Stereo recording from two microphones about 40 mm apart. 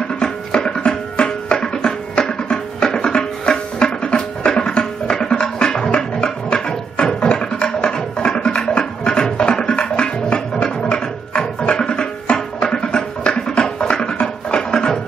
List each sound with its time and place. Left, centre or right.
0.2 s music: left
4.5 s music: centre